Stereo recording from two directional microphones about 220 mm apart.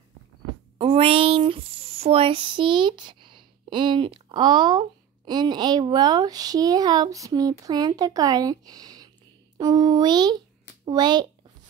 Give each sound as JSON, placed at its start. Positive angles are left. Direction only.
{"t": 0.7, "sound": "speech", "side_deg": -25}